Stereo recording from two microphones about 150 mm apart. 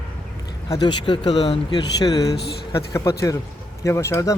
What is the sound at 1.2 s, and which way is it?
Speech, 40° left (ahead or behind).